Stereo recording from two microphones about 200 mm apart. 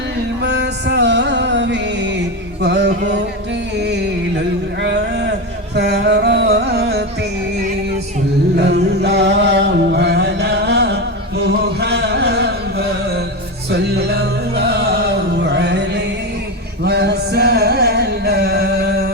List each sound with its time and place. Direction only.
0.4 s music: 60° right (ahead or behind)
4.8 s a sound: 60° right (ahead or behind)
5.7 s music: 60° right (ahead or behind)
8.5 s music: 55° right (ahead or behind)
11.4 s carnatic music: 55° right (ahead or behind)
13.7 s music: 55° right (ahead or behind)